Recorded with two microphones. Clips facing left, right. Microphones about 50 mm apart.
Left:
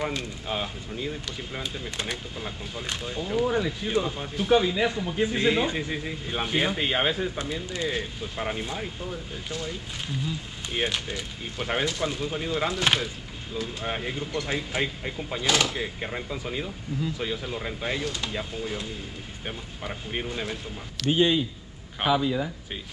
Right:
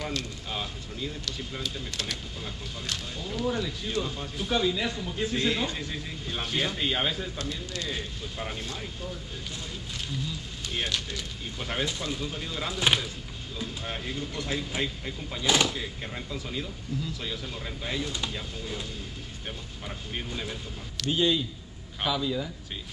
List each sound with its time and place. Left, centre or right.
0.0 s speech: left
10.2 s speech: left
13.8 s speech: left
14.4 s speech: left